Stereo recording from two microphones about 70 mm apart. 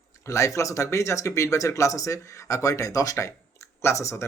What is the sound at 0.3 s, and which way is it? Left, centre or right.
Speech, left.